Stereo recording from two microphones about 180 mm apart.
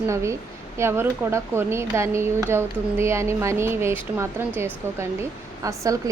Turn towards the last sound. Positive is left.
turn(degrees=-20)  # may be behind; listen again after turning